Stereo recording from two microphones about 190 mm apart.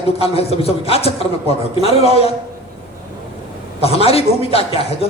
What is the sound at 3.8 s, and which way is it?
A man's voice, 30° left (ahead or behind).